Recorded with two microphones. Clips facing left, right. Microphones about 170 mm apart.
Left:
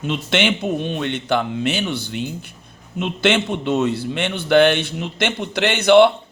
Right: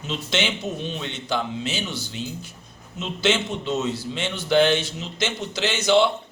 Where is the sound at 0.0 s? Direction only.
60° left (ahead or behind).